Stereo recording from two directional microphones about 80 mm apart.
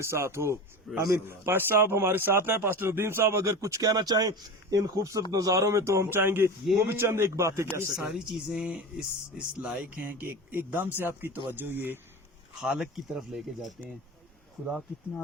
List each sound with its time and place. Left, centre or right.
0.0 s speech: right
0.9 s a man's voice: centre
1.3 s speech: right
8.1 s speech: centre
10.0 s speech: right
12.6 s speech: centre